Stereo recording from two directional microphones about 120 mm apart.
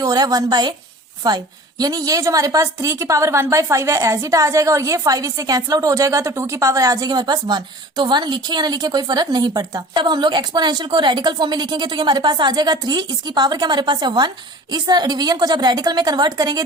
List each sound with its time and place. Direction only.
0.0 s a woman's voice: 30° right (ahead or behind)
1.8 s a woman's voice: 30° right (ahead or behind)